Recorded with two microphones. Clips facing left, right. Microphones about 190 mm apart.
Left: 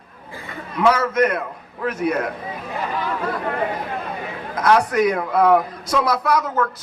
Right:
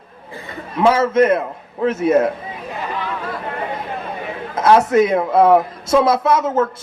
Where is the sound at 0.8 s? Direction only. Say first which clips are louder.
Right 4 dB; 25° right (ahead or behind).